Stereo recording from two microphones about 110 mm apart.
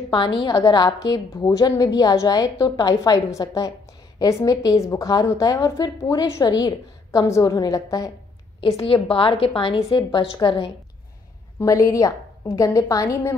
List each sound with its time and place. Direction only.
0.1 s a woman's voice: 45° left (ahead or behind)
7.1 s a woman's voice: 25° left (ahead or behind)
8.5 s a woman's voice: 55° left (ahead or behind)
11.6 s a woman's voice: 30° left (ahead or behind)